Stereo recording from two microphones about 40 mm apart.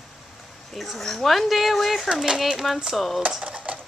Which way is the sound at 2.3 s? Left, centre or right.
Centre.